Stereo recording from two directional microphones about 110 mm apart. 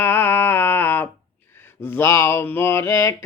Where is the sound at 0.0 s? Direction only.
20° left (ahead or behind).